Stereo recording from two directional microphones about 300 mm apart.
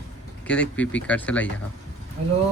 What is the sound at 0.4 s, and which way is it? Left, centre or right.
Speech, centre.